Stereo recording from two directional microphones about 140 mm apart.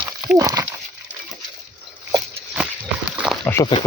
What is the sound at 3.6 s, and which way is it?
Speech, 35° left (ahead or behind).